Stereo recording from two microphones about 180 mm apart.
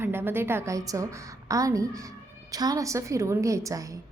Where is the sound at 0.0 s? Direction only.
10° right (ahead or behind).